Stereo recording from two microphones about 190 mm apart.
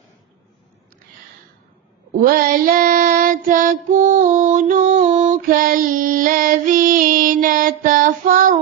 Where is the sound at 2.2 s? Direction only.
50° right (ahead or behind).